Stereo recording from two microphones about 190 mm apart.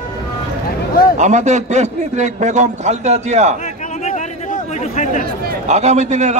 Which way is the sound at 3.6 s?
40° left (ahead or behind).